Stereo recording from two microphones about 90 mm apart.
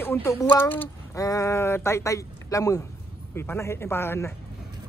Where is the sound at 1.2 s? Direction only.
35° left (ahead or behind).